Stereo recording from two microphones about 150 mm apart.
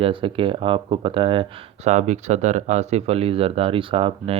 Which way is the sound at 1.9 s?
50° right (ahead or behind).